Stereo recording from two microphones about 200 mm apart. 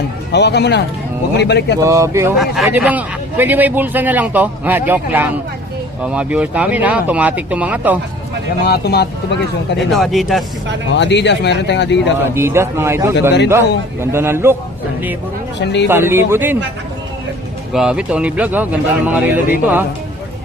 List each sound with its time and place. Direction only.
0.3 s speech: 60° left (ahead or behind)
1.8 s speech: 15° right (ahead or behind)
8.6 s speech: 50° left (ahead or behind)
9.9 s speech: centre (ahead or behind)
10.9 s speech: 60° left (ahead or behind)
12.2 s speech: 10° right (ahead or behind)
15.6 s speech: 60° left (ahead or behind)
15.9 s speech: 10° right (ahead or behind)
17.7 s speech: 5° right (ahead or behind)